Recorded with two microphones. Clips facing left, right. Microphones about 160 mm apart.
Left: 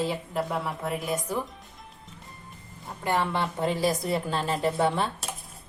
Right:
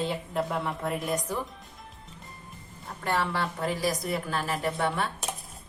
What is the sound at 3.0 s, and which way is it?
A woman's voice, 15° left (ahead or behind).